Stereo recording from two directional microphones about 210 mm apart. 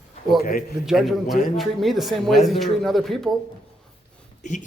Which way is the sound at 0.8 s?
Centre (ahead or behind).